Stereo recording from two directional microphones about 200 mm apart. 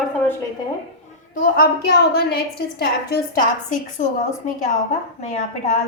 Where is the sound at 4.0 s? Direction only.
35° left (ahead or behind).